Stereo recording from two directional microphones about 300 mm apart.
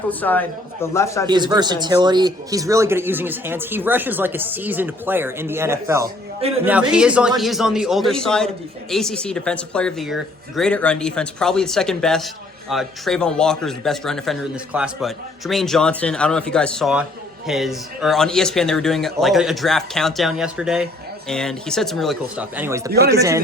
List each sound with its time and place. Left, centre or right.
0.1 s a man's voice: centre
1.3 s speech: centre
22.9 s speech: right
23.1 s speech: centre